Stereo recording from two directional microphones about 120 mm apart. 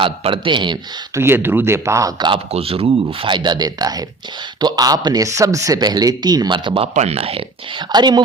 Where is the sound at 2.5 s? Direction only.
55° right (ahead or behind).